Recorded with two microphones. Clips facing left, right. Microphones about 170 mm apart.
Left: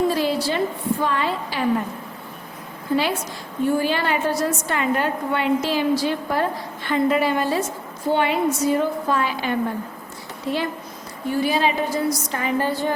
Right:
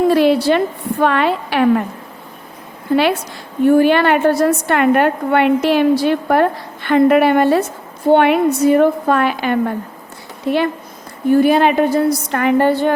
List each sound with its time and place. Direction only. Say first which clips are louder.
0.1 s a woman's voice: right 9 dB; 65° right (ahead or behind)
2.9 s a woman's voice: right 7 dB; 70° right (ahead or behind)